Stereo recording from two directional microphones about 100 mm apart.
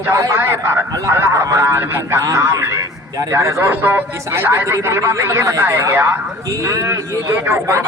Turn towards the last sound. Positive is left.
turn(degrees=-30)  # may be behind; listen again after turning